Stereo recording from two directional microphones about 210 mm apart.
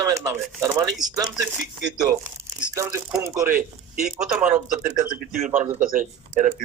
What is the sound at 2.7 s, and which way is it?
Speech, 15° right (ahead or behind).